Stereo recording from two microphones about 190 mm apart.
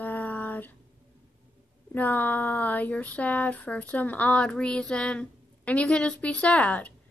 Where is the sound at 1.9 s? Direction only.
10° left (ahead or behind).